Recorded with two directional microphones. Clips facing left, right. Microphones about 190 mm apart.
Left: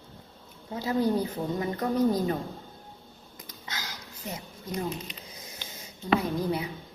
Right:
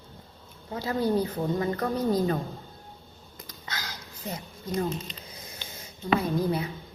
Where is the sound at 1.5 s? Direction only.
20° left (ahead or behind).